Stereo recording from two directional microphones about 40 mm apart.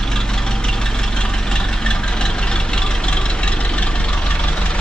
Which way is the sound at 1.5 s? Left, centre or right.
Left.